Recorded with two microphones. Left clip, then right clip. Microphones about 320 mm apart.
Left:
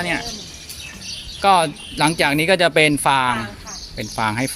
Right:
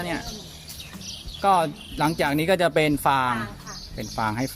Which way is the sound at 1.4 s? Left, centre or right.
Right.